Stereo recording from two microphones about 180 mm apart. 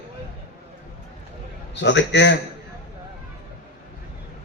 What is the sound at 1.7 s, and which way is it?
Speech, 75° left (ahead or behind).